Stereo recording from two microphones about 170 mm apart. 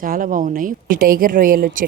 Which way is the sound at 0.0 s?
55° right (ahead or behind).